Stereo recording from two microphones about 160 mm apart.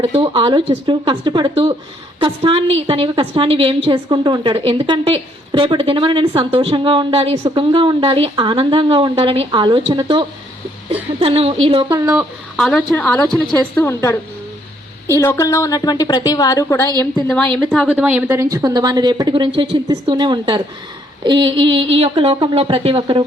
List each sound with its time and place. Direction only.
0.0 s a woman's voice: 35° right (ahead or behind)
11.9 s a woman's voice: 15° right (ahead or behind)
12.5 s a woman's voice: 5° left (ahead or behind)
15.2 s a woman's voice: 20° left (ahead or behind); by 18.4 s 10° right (ahead or behind)
18.5 s a woman's voice: 25° right (ahead or behind)